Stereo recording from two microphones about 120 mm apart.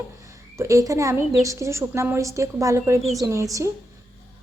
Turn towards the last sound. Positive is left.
turn(degrees=-25)  # may be behind; listen again after turning